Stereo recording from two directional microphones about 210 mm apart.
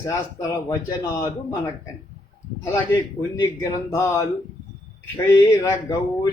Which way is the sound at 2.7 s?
10° left (ahead or behind).